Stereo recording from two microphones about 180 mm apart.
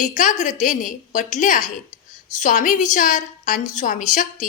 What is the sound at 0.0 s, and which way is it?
A woman's voice, 45° left (ahead or behind).